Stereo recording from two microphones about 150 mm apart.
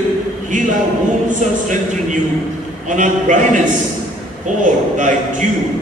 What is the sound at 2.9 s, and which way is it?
Speech, 55° right (ahead or behind).